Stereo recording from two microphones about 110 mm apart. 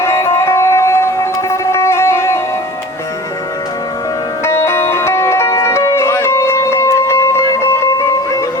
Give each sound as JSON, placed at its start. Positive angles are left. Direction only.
{"t": 0.0, "sound": "music", "side_deg": 25}
{"t": 4.4, "sound": "music", "side_deg": 25}